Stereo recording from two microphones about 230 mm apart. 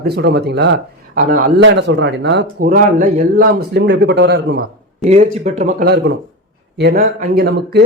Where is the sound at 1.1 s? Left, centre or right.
Right.